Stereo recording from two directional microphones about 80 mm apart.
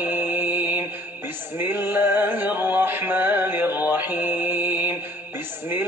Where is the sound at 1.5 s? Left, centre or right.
Right.